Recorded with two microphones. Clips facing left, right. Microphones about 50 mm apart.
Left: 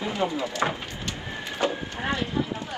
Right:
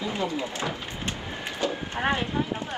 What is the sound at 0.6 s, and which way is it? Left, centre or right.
Speech, left.